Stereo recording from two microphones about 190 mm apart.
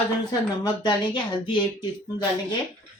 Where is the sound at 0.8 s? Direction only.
25° left (ahead or behind).